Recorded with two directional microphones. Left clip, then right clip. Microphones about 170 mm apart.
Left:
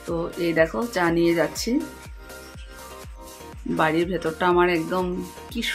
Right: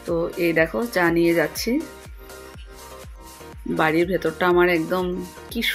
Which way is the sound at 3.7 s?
10° right (ahead or behind).